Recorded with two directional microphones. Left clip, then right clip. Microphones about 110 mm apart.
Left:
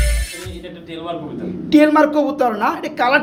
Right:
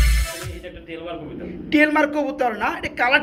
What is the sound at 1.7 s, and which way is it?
Speech, 10° left (ahead or behind).